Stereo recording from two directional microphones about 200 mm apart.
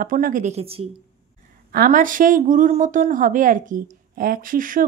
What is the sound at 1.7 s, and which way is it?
A woman's voice, 45° right (ahead or behind).